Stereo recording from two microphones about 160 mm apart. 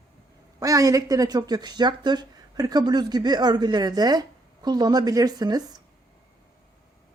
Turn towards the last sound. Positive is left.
turn(degrees=-25)  # may be behind; listen again after turning